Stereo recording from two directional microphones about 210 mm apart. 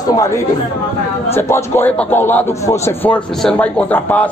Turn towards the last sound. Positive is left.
turn(degrees=10)  # may be behind; listen again after turning